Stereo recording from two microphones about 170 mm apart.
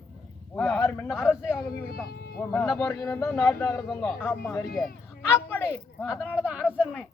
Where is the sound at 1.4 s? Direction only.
5° right (ahead or behind).